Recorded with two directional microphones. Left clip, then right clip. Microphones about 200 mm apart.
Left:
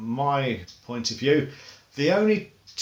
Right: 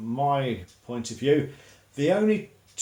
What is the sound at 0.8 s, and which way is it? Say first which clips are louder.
Speech: left 1 dB; 15° left (ahead or behind).